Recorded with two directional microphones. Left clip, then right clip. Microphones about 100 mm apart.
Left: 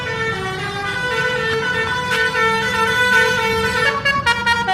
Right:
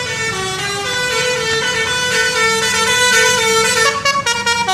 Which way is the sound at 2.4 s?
5° right (ahead or behind).